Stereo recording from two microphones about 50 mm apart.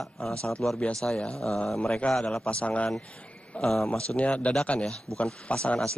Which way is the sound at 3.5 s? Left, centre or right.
Centre.